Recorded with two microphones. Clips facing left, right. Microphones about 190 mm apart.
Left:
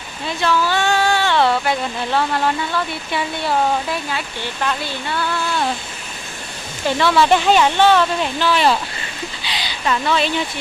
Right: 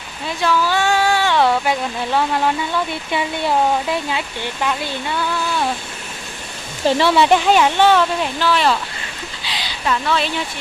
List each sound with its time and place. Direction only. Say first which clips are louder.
0.4 s speech: right 1 dB; 10° right (ahead or behind)
4.6 s speech: right 1 dB; 10° right (ahead or behind)
6.8 s speech: right 2 dB; 25° right (ahead or behind)
7.3 s speech: even; 5° right (ahead or behind)
9.5 s a sound: even; centre (ahead or behind)